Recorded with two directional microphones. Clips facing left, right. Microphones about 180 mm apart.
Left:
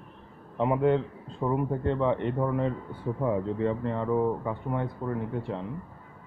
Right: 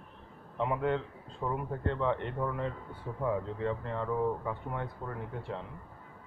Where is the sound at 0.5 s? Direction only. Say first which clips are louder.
Left 7 dB; 20° left (ahead or behind).